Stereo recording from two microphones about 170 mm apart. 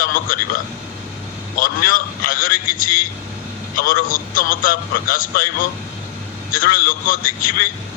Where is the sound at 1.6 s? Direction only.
55° left (ahead or behind).